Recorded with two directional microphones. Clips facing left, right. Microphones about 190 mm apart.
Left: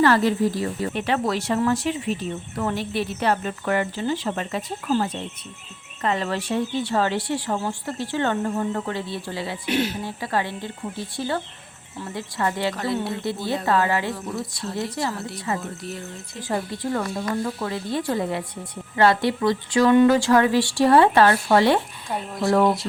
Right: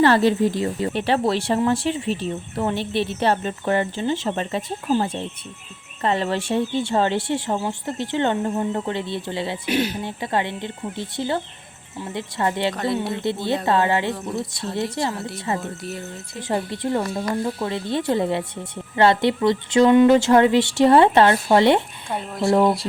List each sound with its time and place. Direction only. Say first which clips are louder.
0.0 s speech: right 2 dB; 30° right (ahead or behind)
9.6 s speech: even; centre (ahead or behind)
10.0 s speech: right 2 dB; 25° right (ahead or behind)